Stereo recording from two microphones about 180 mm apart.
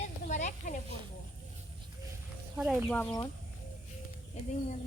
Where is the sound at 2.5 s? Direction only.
Centre (ahead or behind).